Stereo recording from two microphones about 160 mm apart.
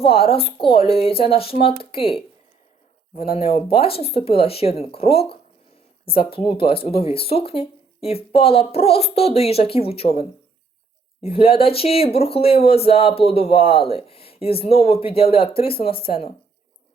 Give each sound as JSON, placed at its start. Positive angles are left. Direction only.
{"t": 0.0, "sound": "speech", "side_deg": 35}
{"t": 3.2, "sound": "speech", "side_deg": 35}